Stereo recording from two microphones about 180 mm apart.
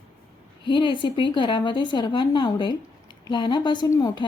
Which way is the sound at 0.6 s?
25° left (ahead or behind).